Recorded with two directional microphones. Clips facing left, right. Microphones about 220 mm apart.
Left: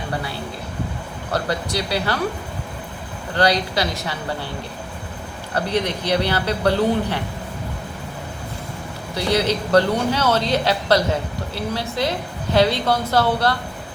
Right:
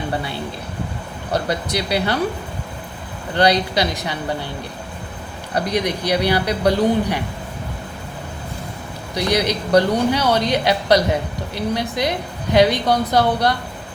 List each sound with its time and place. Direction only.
1.3 s speech: 20° right (ahead or behind)
3.3 s speech: 20° right (ahead or behind)
5.5 s speech: 15° right (ahead or behind)
9.1 s speech: 15° right (ahead or behind)